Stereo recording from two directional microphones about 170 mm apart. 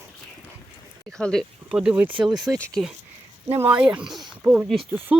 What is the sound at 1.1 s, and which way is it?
Speech, 5° left (ahead or behind).